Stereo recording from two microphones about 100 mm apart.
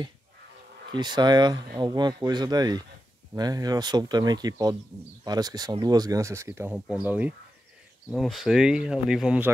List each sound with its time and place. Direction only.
0.9 s speech: 50° right (ahead or behind); by 6.8 s 25° right (ahead or behind)
6.9 s speech: 15° right (ahead or behind)
8.1 s speech: centre (ahead or behind)